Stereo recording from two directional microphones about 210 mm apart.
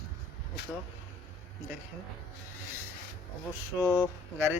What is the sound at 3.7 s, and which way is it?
Speech, 5° right (ahead or behind).